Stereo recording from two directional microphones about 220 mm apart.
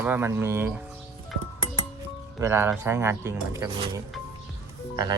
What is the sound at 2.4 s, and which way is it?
Speech, 10° right (ahead or behind).